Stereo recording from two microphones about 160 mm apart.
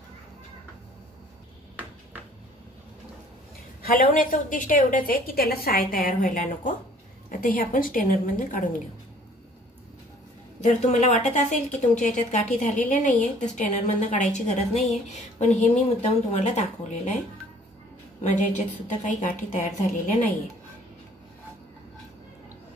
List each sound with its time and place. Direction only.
3.8 s a woman's voice: 60° left (ahead or behind)
10.6 s a woman's voice: 45° left (ahead or behind)
18.2 s a woman's voice: 50° left (ahead or behind)